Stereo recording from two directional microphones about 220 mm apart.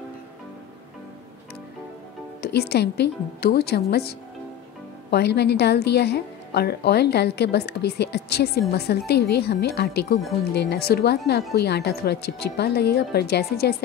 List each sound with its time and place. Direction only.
2.4 s a woman's voice: 45° left (ahead or behind)
5.1 s a woman's voice: 50° left (ahead or behind)